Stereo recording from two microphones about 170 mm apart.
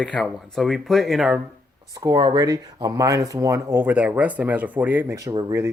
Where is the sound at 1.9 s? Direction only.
20° right (ahead or behind).